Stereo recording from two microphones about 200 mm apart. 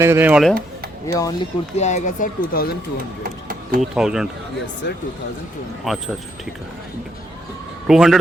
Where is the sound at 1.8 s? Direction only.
35° left (ahead or behind).